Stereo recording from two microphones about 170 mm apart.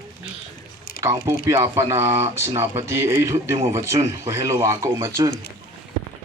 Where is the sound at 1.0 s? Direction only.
20° right (ahead or behind).